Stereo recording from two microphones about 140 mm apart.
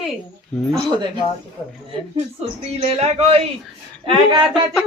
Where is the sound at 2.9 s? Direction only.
45° right (ahead or behind).